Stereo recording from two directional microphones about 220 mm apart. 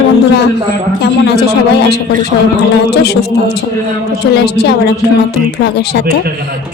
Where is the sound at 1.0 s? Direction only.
50° left (ahead or behind).